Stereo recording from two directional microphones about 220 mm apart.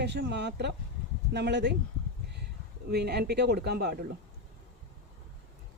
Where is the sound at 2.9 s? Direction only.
50° right (ahead or behind).